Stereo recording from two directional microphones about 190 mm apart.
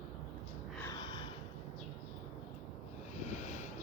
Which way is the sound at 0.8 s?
15° left (ahead or behind).